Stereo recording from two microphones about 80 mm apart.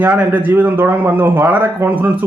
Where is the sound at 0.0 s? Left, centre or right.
Right.